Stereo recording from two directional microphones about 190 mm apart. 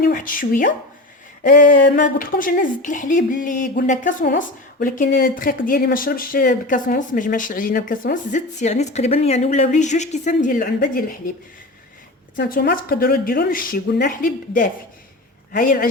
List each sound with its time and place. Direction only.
0.0 s speech: 45° left (ahead or behind)
12.4 s speech: 55° left (ahead or behind)